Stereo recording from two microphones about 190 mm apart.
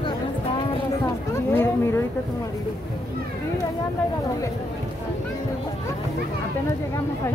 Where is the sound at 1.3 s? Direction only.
10° left (ahead or behind).